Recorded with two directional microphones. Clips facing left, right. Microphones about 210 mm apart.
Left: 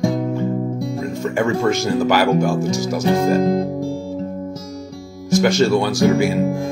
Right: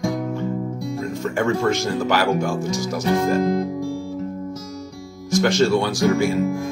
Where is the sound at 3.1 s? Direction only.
25° left (ahead or behind).